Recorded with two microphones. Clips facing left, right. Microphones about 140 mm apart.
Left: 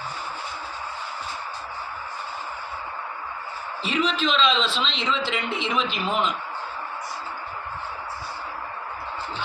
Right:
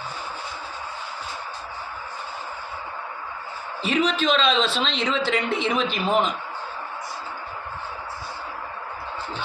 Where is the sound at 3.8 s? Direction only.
45° right (ahead or behind).